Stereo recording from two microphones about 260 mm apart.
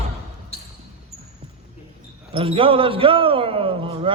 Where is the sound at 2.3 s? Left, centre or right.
Right.